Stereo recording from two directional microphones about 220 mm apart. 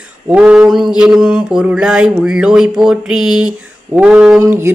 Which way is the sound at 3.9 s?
5° right (ahead or behind).